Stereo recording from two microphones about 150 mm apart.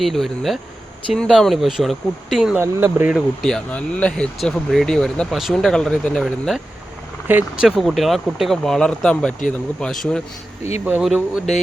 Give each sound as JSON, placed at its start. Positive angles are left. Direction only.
{"t": 0.0, "sound": "speech", "side_deg": 0}
{"t": 2.6, "sound": "speech", "side_deg": -15}
{"t": 3.1, "sound": "speech", "side_deg": 0}
{"t": 7.3, "sound": "speech", "side_deg": -10}